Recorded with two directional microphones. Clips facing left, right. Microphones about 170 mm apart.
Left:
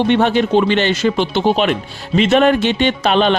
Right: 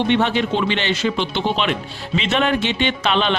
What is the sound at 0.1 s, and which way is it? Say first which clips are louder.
Speech: left 5 dB; 45° left (ahead or behind).